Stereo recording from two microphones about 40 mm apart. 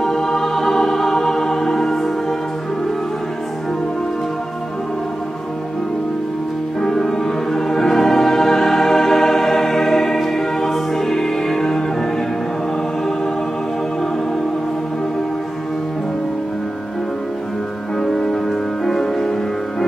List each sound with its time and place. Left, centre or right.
0.0 s music: centre
6.8 s music: centre
18.0 s music: centre